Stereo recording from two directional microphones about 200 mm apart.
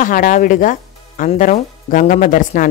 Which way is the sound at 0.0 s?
40° left (ahead or behind).